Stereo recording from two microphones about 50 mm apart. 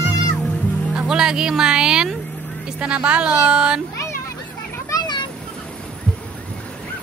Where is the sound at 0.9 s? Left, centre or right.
Centre.